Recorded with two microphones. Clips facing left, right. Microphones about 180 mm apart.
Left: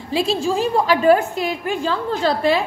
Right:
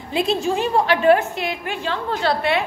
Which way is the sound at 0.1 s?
30° left (ahead or behind).